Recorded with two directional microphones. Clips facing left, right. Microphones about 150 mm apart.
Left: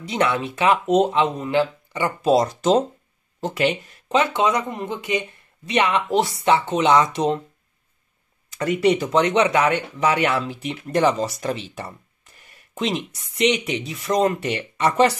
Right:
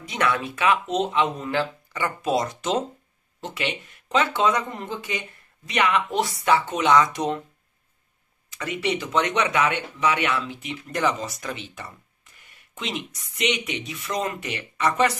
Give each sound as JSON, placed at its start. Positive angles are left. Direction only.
{"t": 0.0, "sound": "speech", "side_deg": 30}
{"t": 0.8, "sound": "speech", "side_deg": 45}
{"t": 1.4, "sound": "speech", "side_deg": 20}
{"t": 3.3, "sound": "speech", "side_deg": 40}
{"t": 4.1, "sound": "speech", "side_deg": 20}
{"t": 8.5, "sound": "speech", "side_deg": 40}